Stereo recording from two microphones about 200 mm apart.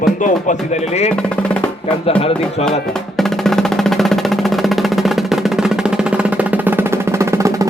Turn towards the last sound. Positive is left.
turn(degrees=-15)  # may be behind; listen again after turning